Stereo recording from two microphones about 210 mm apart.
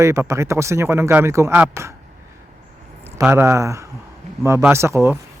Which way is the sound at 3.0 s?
10° right (ahead or behind).